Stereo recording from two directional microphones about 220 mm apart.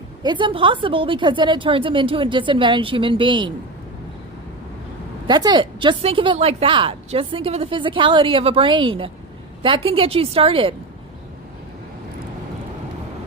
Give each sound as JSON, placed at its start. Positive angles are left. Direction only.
{"t": 0.2, "sound": "a woman's voice", "side_deg": -20}
{"t": 5.3, "sound": "a woman's voice", "side_deg": -20}